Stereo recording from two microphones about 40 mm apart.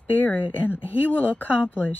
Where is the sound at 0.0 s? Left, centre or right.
Left.